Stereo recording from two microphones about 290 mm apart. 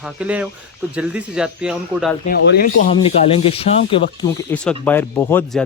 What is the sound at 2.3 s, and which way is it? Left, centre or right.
Speech, left.